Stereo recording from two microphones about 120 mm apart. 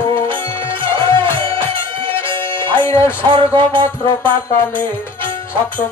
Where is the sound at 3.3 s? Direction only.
40° right (ahead or behind).